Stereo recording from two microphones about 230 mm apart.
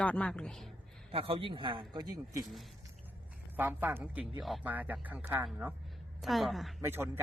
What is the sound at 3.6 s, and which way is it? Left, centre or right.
A woman's voice, centre.